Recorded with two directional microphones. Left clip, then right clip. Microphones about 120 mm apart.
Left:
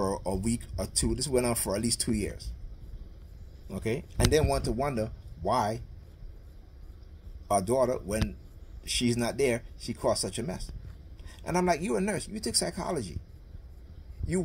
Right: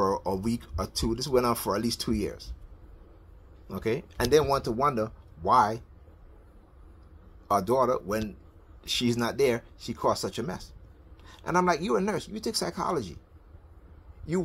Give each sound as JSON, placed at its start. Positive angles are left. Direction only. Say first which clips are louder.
{"t": 0.0, "sound": "speech", "louder": "right 4 dB", "side_deg": 20}
{"t": 3.6, "sound": "speech", "louder": "right 3 dB", "side_deg": 15}
{"t": 7.6, "sound": "speech", "louder": "right 2 dB", "side_deg": 15}